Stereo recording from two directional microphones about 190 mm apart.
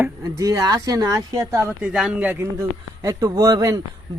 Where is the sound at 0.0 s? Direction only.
20° right (ahead or behind).